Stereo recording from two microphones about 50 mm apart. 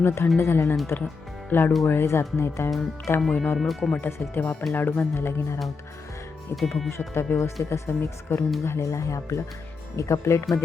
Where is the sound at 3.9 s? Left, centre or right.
Left.